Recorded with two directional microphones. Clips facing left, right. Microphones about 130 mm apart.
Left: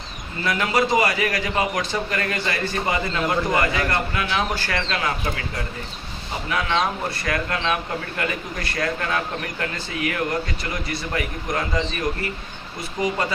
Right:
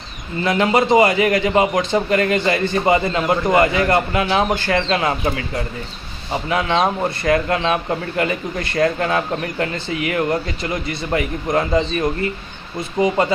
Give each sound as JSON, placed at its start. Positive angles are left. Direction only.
{"t": 0.4, "sound": "a man's voice", "side_deg": -25}
{"t": 6.5, "sound": "a man's voice", "side_deg": -25}